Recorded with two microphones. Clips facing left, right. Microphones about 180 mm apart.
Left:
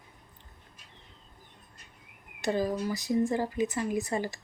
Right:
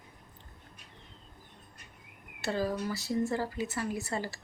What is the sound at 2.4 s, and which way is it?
Speech, 15° left (ahead or behind).